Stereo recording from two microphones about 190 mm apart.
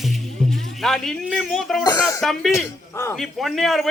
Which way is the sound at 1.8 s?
20° left (ahead or behind).